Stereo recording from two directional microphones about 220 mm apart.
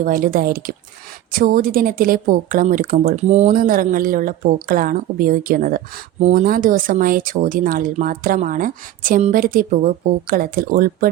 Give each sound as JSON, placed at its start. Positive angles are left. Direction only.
{"t": 0.0, "sound": "speech", "side_deg": -40}